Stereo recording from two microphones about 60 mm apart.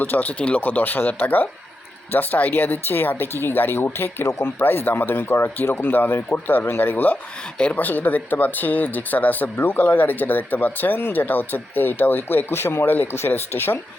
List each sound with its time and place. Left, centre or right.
0.0 s speech: left
4.3 s speech: left
4.6 s speech: left